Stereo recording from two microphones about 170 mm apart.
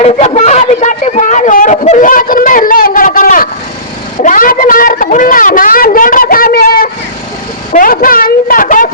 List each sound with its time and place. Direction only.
0.0 s a man's voice: 40° left (ahead or behind)